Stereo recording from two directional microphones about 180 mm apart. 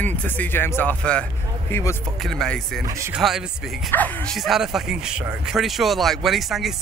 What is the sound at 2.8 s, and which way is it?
Speech, 15° right (ahead or behind).